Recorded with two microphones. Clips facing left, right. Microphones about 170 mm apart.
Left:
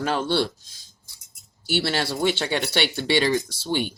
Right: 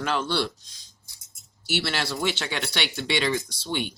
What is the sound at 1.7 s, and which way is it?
Speech, 35° left (ahead or behind).